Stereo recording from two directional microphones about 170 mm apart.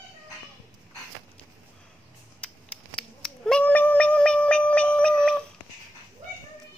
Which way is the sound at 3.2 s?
5° left (ahead or behind).